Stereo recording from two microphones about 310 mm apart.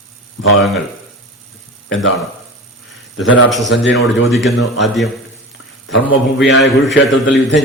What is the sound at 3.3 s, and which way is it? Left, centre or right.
A man's voice, centre.